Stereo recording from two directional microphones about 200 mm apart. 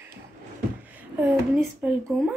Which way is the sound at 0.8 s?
10° right (ahead or behind).